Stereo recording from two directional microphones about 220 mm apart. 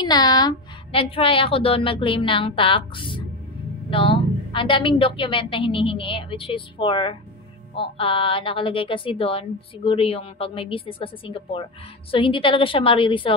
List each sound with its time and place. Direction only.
0.0 s a woman's voice: 20° left (ahead or behind)